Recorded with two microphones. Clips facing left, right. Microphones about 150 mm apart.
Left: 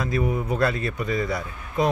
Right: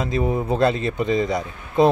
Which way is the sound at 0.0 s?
25° right (ahead or behind).